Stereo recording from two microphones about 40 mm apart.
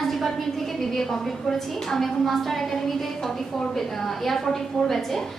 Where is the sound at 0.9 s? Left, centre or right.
Centre.